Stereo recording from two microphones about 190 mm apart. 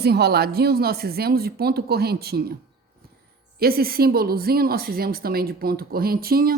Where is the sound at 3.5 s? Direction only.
55° right (ahead or behind).